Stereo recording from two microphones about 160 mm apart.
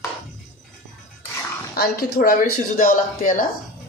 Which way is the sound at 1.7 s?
75° left (ahead or behind).